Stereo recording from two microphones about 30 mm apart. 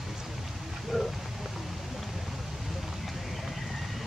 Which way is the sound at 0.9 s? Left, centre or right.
Centre.